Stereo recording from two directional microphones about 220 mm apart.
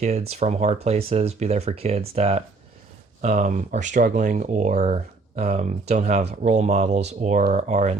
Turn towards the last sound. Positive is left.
turn(degrees=-30)  # may be behind; listen again after turning